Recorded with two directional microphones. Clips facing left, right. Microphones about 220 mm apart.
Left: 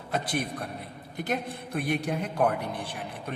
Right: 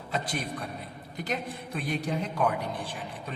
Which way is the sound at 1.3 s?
55° left (ahead or behind).